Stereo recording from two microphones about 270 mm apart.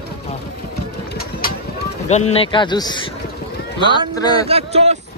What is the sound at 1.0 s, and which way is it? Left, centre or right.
Vehicle, left.